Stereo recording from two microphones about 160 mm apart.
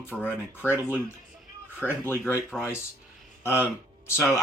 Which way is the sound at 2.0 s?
15° left (ahead or behind).